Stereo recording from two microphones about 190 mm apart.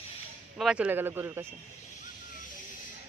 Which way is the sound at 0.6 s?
5° right (ahead or behind).